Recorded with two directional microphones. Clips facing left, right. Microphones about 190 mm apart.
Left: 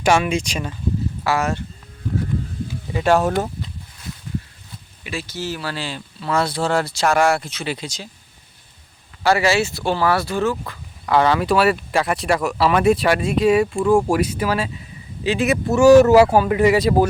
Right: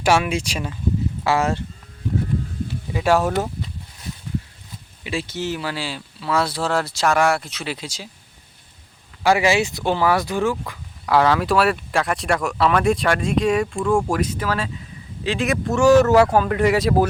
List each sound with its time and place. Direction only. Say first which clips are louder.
0.0 s speech: left 1 dB; 5° right (ahead or behind)
1.2 s speech: right 1 dB; 25° right (ahead or behind)
2.9 s speech: left 1 dB; 5° right (ahead or behind)
5.0 s speech: right 2 dB; 25° right (ahead or behind); by 8.1 s 10° right (ahead or behind)
9.2 s speech: even; 15° right (ahead or behind)
11.0 s speech: even; centre (ahead or behind)